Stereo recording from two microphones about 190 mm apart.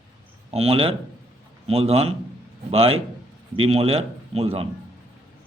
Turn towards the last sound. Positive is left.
turn(degrees=-30)  # may be behind; listen again after turning